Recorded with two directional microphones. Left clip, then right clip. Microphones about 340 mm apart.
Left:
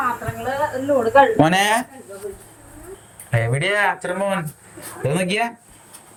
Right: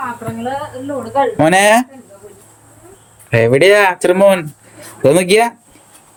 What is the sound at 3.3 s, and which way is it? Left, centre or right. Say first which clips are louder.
Speech: right 12 dB; right.